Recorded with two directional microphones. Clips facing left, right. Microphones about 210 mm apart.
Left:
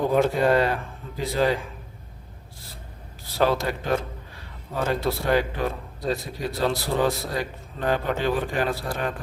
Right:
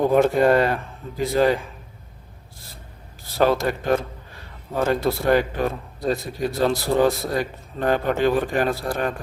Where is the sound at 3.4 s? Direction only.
50° right (ahead or behind).